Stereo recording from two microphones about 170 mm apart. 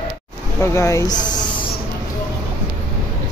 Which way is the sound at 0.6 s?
15° left (ahead or behind).